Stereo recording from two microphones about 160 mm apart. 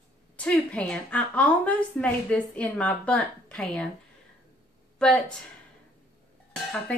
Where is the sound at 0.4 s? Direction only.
10° left (ahead or behind).